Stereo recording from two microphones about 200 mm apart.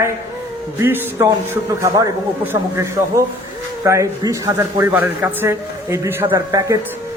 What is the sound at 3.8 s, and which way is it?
A man's voice, 15° right (ahead or behind).